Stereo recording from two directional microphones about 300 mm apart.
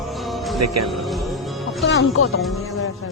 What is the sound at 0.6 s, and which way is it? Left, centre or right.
Speech, right.